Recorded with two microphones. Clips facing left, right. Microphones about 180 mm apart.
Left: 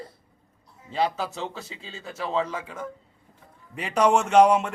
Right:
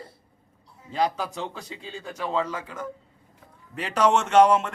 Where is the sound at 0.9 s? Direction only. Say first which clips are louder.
Even; 5° left (ahead or behind).